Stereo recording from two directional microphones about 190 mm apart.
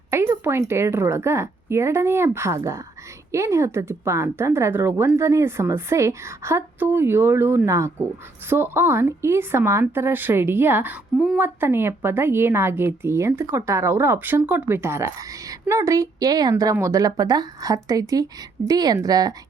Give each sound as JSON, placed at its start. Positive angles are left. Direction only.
{"t": 0.1, "sound": "speech", "side_deg": -15}